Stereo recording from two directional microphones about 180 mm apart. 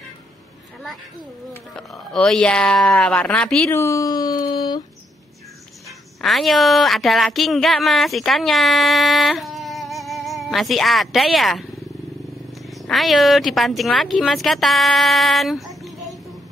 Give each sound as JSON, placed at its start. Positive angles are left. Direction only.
{"t": 1.5, "sound": "speech", "side_deg": 5}
{"t": 5.9, "sound": "a woman's voice", "side_deg": 0}
{"t": 12.6, "sound": "speech", "side_deg": 0}